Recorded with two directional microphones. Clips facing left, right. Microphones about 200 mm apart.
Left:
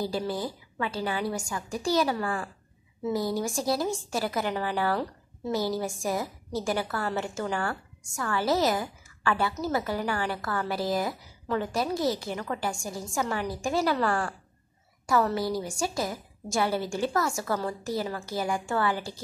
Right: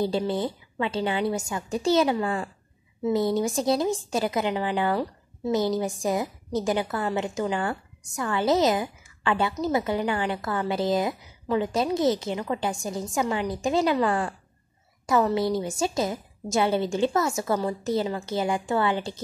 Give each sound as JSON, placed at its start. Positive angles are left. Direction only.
{"t": 0.0, "sound": "a woman's voice", "side_deg": -25}